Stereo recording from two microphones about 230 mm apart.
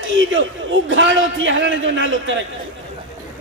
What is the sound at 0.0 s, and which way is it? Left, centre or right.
A man's voice, right.